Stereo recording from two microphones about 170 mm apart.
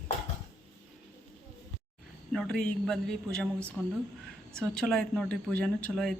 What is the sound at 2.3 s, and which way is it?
Speech, 5° left (ahead or behind).